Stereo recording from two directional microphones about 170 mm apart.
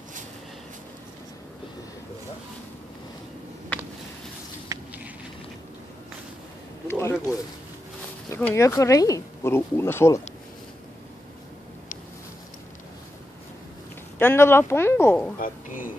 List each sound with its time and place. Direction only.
4.6 s a sound: 10° right (ahead or behind)
6.9 s speech: 15° left (ahead or behind)
8.3 s speech: 15° left (ahead or behind)
14.1 s speech: 15° left (ahead or behind)
15.3 s a woman's voice: 55° left (ahead or behind)